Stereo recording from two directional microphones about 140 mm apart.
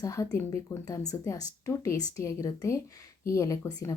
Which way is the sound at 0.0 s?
25° left (ahead or behind).